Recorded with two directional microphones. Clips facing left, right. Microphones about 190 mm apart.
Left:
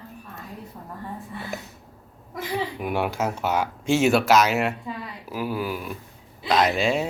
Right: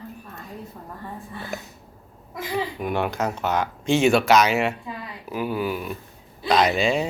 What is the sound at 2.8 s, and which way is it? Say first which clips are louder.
Speech: even; 10° left (ahead or behind).